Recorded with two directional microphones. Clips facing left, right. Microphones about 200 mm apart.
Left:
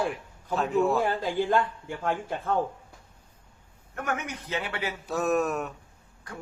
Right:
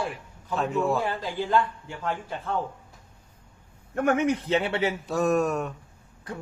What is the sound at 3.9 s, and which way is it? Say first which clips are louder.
A man's voice: right 10 dB; 30° right (ahead or behind).